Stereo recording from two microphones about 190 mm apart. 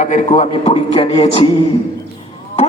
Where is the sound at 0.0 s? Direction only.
40° left (ahead or behind).